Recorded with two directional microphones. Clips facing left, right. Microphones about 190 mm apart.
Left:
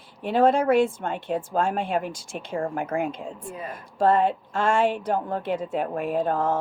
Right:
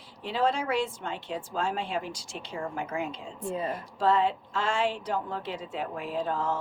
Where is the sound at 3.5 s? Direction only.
30° right (ahead or behind).